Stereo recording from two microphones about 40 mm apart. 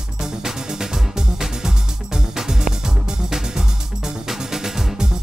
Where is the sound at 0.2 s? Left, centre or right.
Centre.